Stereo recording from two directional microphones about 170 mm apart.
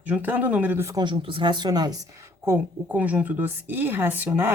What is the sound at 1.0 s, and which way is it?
Speech, 30° right (ahead or behind).